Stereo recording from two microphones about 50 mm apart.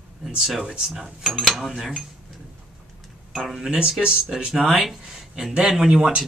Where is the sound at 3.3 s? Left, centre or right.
Centre.